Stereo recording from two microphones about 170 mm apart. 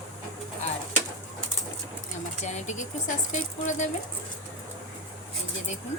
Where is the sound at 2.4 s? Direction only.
45° left (ahead or behind).